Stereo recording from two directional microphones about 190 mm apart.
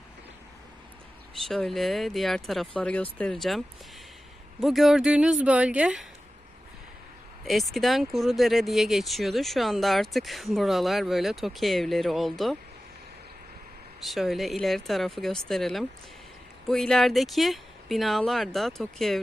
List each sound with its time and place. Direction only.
1.4 s speech: centre (ahead or behind)
4.6 s speech: centre (ahead or behind)
7.4 s speech: centre (ahead or behind)
14.0 s speech: centre (ahead or behind)